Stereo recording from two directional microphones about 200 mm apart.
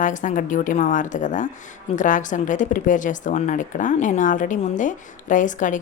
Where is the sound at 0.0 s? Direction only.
40° left (ahead or behind).